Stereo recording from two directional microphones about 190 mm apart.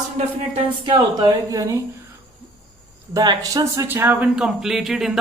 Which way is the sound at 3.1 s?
20° right (ahead or behind).